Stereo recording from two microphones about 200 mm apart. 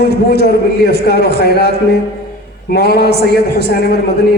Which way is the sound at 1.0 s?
55° left (ahead or behind).